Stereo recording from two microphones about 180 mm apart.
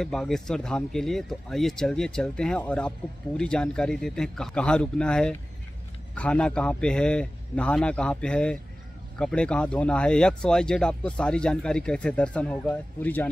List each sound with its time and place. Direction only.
0.0 s speech: 5° left (ahead or behind)